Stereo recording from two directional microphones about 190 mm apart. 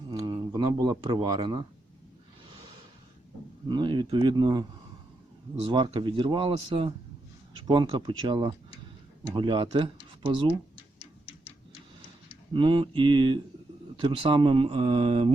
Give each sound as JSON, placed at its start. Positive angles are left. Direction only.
{"t": 0.1, "sound": "speech", "side_deg": -20}
{"t": 3.7, "sound": "speech", "side_deg": -25}
{"t": 5.7, "sound": "speech", "side_deg": -25}
{"t": 12.5, "sound": "speech", "side_deg": -25}